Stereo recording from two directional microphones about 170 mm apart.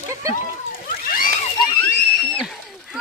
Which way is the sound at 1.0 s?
55° left (ahead or behind).